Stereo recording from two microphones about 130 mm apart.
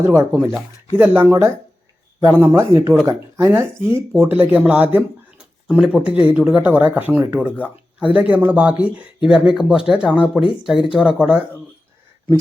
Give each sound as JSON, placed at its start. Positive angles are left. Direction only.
{"t": 0.0, "sound": "speech", "side_deg": -20}